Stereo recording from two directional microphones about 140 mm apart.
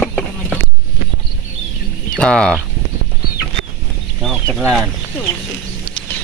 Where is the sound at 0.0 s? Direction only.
5° left (ahead or behind).